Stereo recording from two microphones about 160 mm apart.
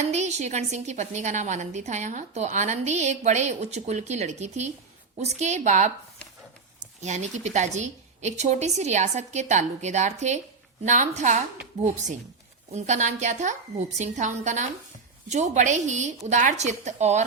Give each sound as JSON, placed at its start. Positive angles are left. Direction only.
{"t": 0.1, "sound": "a woman's voice", "side_deg": -45}
{"t": 7.0, "sound": "a woman's voice", "side_deg": -45}